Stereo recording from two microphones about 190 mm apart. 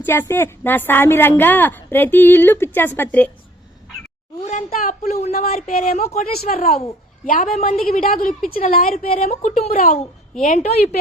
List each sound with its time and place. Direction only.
0.0 s a woman's voice: 10° left (ahead or behind)
4.4 s a woman's voice: 40° left (ahead or behind)